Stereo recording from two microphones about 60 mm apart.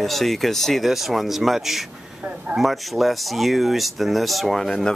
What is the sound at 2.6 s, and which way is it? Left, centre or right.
Speech, centre.